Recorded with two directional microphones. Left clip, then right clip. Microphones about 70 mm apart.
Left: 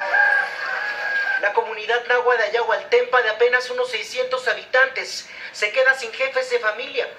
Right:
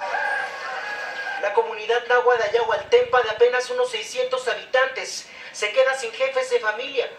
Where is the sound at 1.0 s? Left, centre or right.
Right.